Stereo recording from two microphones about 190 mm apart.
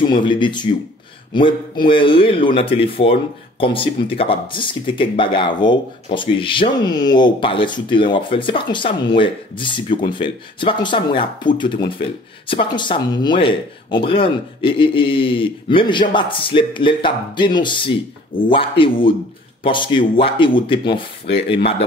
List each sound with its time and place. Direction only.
0.0 s speech: 25° left (ahead or behind)